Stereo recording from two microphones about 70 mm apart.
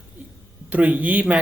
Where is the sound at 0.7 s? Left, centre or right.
Right.